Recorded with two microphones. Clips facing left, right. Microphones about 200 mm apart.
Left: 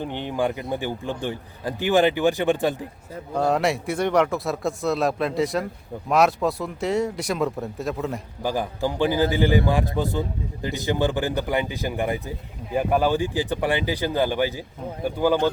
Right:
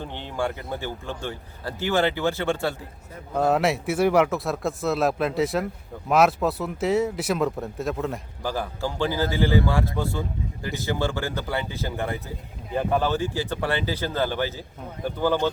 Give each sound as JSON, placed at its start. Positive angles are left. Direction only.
{"t": 0.0, "sound": "a man's voice", "side_deg": 15}
{"t": 3.3, "sound": "speech", "side_deg": 0}
{"t": 8.4, "sound": "a man's voice", "side_deg": 15}